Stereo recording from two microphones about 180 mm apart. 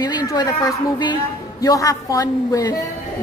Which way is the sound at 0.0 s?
20° left (ahead or behind).